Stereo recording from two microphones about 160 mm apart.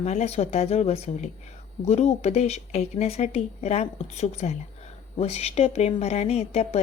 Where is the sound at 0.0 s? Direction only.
40° left (ahead or behind).